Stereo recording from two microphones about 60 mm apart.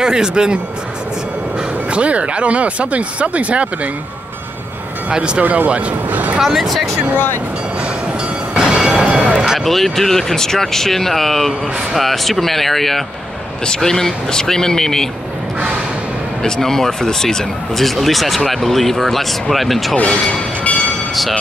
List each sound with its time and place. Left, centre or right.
0.0 s speech: centre
1.9 s speech: right
5.1 s speech: centre
5.4 s speech: right
6.4 s speech: centre
8.5 s a sound: centre
9.6 s speech: centre
16.4 s speech: centre
21.1 s speech: centre